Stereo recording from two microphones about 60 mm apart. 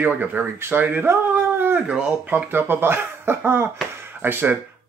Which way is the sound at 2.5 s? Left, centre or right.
Right.